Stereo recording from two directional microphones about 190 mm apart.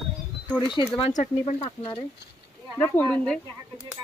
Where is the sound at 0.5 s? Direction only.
25° left (ahead or behind).